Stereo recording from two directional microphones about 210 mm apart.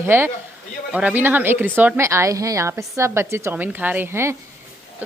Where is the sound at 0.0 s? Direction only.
10° right (ahead or behind).